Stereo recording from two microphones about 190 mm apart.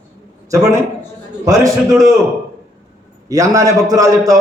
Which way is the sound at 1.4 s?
15° right (ahead or behind).